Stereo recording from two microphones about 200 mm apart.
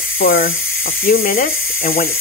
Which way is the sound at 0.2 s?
45° left (ahead or behind).